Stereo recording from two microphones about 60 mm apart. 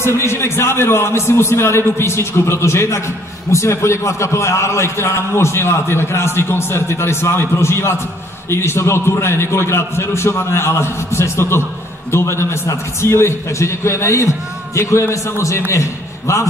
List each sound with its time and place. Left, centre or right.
0.0 s a man's voice: left